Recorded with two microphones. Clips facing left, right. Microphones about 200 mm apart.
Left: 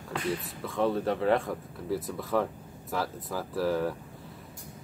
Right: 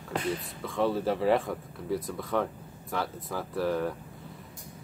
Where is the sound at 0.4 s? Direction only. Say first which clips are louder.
Even; centre (ahead or behind).